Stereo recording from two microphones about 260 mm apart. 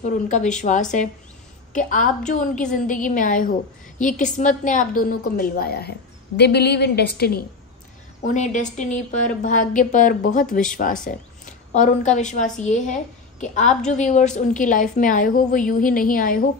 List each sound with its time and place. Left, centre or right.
0.3 s a woman's voice: left